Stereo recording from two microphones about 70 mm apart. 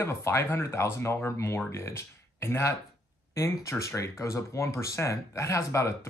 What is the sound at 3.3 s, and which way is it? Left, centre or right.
Speech, left.